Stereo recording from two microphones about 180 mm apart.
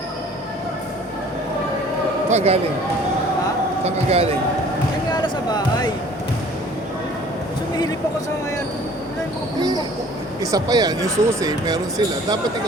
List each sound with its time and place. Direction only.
2.3 s speech: 35° right (ahead or behind)
3.8 s speech: 35° right (ahead or behind)
5.1 s basketball bounce: 20° left (ahead or behind)
9.6 s speech: 20° right (ahead or behind)